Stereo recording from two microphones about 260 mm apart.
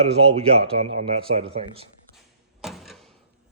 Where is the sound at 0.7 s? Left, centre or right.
Centre.